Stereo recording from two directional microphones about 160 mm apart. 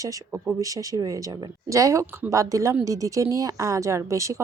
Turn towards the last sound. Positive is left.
turn(degrees=-20)  # may be behind; listen again after turning